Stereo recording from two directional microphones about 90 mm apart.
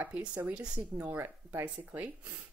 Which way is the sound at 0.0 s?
15° right (ahead or behind).